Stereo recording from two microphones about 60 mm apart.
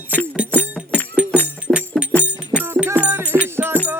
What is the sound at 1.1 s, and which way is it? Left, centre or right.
Music, centre.